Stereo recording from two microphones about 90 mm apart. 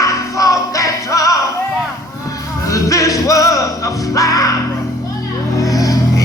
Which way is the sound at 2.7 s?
40° left (ahead or behind).